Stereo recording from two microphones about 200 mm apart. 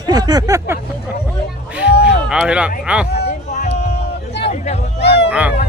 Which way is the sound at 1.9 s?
55° left (ahead or behind).